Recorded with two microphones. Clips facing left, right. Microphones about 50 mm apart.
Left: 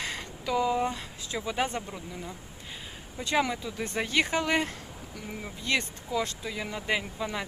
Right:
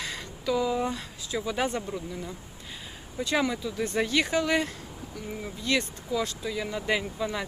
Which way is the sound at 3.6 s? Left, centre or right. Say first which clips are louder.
Right 4 dB; left.